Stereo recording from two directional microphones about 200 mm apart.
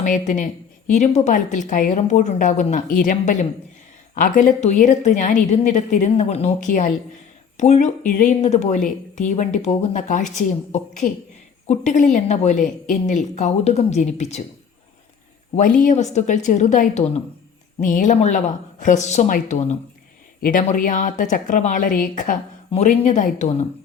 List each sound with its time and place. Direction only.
0.0 s a woman's voice: 40° left (ahead or behind)
15.5 s a woman's voice: 40° left (ahead or behind)